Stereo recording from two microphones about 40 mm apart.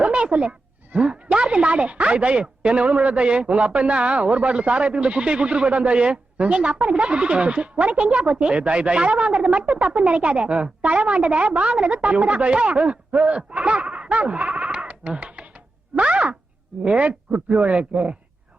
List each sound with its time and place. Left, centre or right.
0.0 s goat: right
0.9 s a woman's voice: right
13.1 s bleat: right
16.0 s speech: right